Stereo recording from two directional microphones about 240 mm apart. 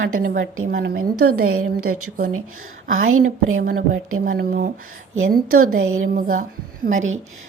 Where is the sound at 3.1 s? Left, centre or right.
Right.